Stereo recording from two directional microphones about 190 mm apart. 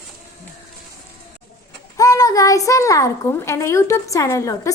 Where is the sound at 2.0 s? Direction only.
20° left (ahead or behind).